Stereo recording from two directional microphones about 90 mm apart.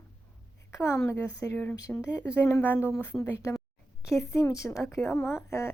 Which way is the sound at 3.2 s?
35° left (ahead or behind).